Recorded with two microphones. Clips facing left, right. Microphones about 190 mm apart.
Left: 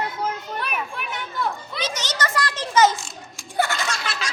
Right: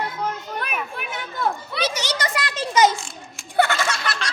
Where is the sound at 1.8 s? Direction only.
10° right (ahead or behind).